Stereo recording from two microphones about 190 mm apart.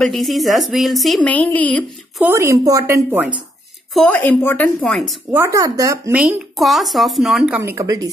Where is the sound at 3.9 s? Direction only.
5° left (ahead or behind).